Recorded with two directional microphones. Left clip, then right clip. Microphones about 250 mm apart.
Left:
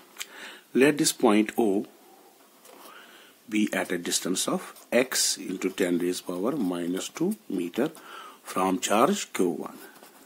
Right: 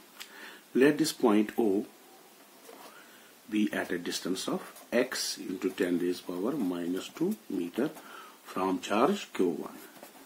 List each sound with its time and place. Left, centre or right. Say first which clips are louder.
0.2 s speech: left 6 dB; left
3.4 s speech: left 4 dB; left